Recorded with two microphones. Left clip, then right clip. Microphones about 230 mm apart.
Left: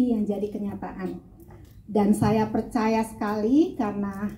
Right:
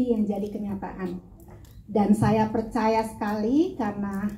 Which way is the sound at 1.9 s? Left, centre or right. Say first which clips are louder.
Even; left.